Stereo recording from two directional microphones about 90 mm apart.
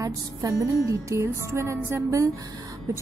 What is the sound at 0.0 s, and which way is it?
Music, 40° right (ahead or behind).